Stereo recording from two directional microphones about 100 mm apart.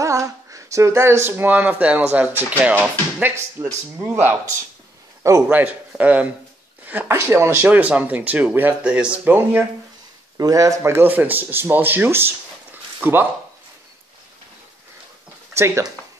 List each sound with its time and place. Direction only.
0.0 s speech: 30° right (ahead or behind)
5.5 s speech: 15° right (ahead or behind)
10.3 s speech: 35° right (ahead or behind); by 13.3 s 20° right (ahead or behind)
15.5 s speech: 25° right (ahead or behind)